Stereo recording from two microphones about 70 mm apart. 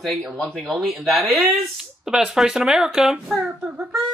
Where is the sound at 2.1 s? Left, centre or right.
Centre.